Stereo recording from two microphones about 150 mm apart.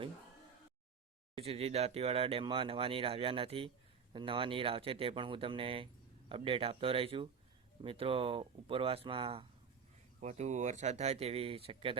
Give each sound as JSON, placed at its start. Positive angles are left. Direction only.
{"t": 1.4, "sound": "speech", "side_deg": -40}
{"t": 10.2, "sound": "speech", "side_deg": -50}